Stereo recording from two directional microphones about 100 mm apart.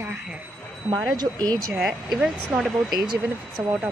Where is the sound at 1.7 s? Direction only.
Centre (ahead or behind).